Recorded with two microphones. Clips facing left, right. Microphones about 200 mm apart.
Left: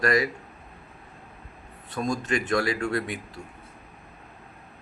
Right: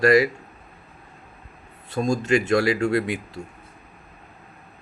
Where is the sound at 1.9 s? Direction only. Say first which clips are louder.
Right 6 dB; 25° right (ahead or behind).